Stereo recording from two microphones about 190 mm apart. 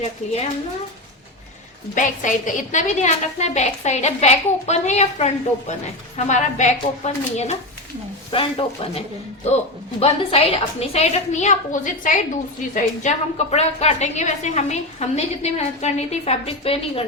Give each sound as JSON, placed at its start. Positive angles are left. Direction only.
{"t": 0.2, "sound": "a woman's voice", "side_deg": 35}
{"t": 2.0, "sound": "a woman's voice", "side_deg": 40}